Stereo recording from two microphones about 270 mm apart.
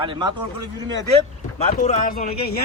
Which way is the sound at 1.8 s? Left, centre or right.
Left.